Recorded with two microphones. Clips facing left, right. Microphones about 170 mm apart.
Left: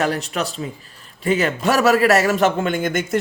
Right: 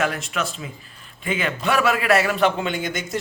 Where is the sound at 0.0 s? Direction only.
35° left (ahead or behind).